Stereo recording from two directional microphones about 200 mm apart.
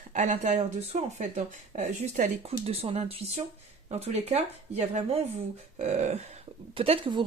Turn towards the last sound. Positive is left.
turn(degrees=-25)  # may be behind; listen again after turning